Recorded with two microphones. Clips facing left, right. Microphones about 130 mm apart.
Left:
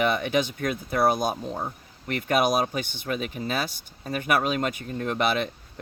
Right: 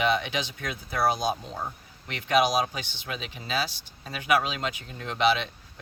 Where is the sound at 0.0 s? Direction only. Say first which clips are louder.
Left 3 dB; 50° left (ahead or behind).